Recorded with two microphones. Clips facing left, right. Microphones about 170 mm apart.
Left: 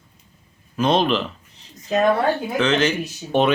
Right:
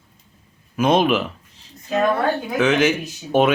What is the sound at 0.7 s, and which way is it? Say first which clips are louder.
Speech: right 2 dB; 10° right (ahead or behind).